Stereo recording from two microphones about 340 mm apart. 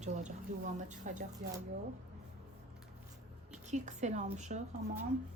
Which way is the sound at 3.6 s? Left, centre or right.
Right.